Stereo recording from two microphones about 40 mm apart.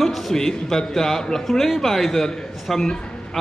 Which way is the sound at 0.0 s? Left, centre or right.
Centre.